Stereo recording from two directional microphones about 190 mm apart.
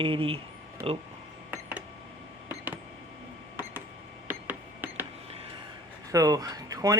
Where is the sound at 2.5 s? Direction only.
10° right (ahead or behind).